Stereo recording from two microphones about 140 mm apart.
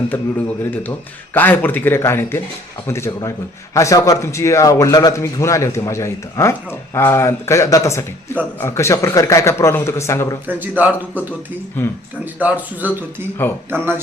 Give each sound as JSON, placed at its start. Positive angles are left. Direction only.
{"t": 0.6, "sound": "a man's voice", "side_deg": 15}
{"t": 10.4, "sound": "speech", "side_deg": -15}
{"t": 11.8, "sound": "a man's voice", "side_deg": 15}
{"t": 12.2, "sound": "speech", "side_deg": -10}